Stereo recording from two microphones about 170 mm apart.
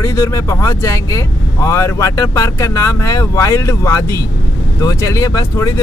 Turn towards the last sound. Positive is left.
turn(degrees=20)  # may be behind; listen again after turning